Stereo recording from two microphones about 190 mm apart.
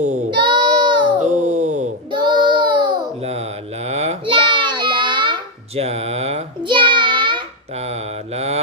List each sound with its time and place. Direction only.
0.3 s child singing: 25° right (ahead or behind)
1.2 s a sound: 40° right (ahead or behind)
2.1 s child singing: 25° right (ahead or behind)
3.8 s child singing: 35° right (ahead or behind)
8.4 s mantra: 35° right (ahead or behind)